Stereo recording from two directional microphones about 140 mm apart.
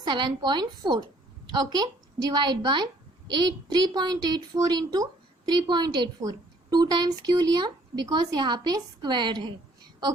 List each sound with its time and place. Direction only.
0.0 s a woman's voice: 30° right (ahead or behind)